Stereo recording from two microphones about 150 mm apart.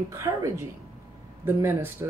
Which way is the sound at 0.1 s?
20° right (ahead or behind).